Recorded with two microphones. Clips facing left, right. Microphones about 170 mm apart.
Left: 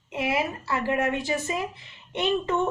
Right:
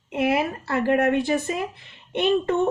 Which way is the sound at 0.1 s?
55° right (ahead or behind).